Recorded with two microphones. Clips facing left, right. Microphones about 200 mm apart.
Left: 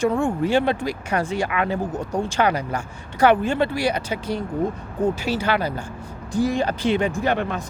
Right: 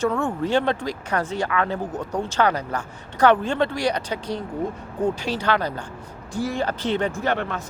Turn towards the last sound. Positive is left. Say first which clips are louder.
# left 2 dB
turn(degrees=15)  # may be behind; listen again after turning